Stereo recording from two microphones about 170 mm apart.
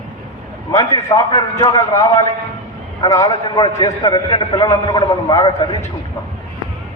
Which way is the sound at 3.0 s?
25° left (ahead or behind).